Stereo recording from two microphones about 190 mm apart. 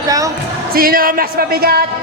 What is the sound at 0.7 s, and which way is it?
Speech, 50° right (ahead or behind).